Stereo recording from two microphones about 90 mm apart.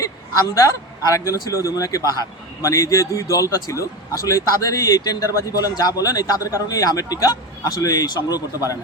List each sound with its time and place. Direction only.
1.1 s a man's voice: 40° left (ahead or behind)